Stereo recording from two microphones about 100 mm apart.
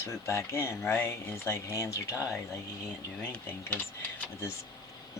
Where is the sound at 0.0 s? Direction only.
25° left (ahead or behind).